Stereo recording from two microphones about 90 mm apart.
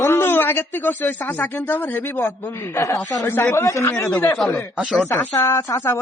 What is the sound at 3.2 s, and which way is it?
Speech, 25° left (ahead or behind).